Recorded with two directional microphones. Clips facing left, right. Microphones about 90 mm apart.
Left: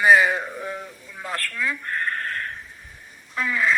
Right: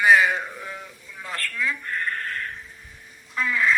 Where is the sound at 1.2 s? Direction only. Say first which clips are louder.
Left 2 dB; 25° left (ahead or behind).